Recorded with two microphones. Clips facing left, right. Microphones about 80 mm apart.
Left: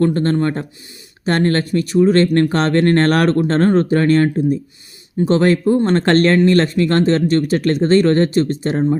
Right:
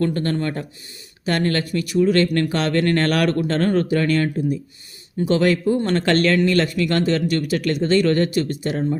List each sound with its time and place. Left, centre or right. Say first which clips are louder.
0.0 s speech: left 6 dB; left